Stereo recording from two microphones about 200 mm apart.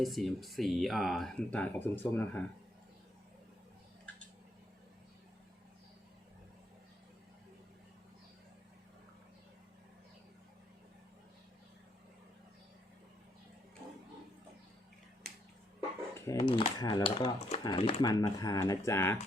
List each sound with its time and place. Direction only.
0.0 s speech: centre (ahead or behind)
16.2 s speech: 20° left (ahead or behind)